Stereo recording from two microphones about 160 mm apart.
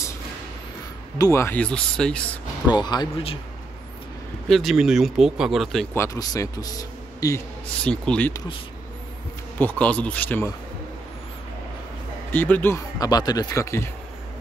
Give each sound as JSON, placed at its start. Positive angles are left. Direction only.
{"t": 1.1, "sound": "speech", "side_deg": 20}
{"t": 2.7, "sound": "speech", "side_deg": 25}
{"t": 4.5, "sound": "speech", "side_deg": 0}
{"t": 5.9, "sound": "a man's voice", "side_deg": 20}
{"t": 7.8, "sound": "speech", "side_deg": 5}
{"t": 9.6, "sound": "speech", "side_deg": 10}
{"t": 12.3, "sound": "speech", "side_deg": 10}